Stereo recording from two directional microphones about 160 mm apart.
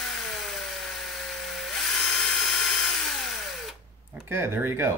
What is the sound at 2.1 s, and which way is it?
Tools, centre (ahead or behind).